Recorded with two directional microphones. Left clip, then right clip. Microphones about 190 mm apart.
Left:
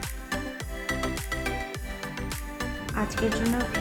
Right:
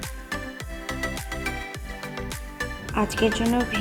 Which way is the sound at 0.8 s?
Centre (ahead or behind).